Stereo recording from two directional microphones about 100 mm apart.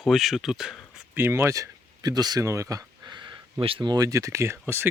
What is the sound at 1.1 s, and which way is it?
Speech, 25° right (ahead or behind).